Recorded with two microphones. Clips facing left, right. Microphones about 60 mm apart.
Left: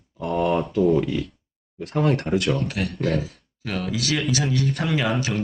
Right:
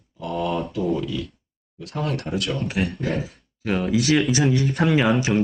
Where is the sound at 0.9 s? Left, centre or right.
Left.